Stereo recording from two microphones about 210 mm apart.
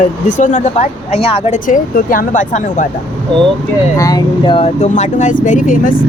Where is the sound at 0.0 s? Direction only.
35° left (ahead or behind).